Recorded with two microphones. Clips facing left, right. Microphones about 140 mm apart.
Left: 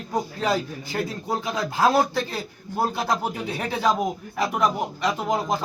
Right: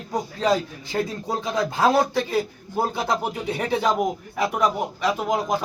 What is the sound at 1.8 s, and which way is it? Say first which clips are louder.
Speech: even; 15° right (ahead or behind).